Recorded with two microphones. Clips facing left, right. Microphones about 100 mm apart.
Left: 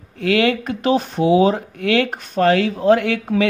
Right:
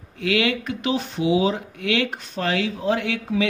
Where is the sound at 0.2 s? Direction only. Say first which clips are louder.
Left 5 dB; 45° left (ahead or behind).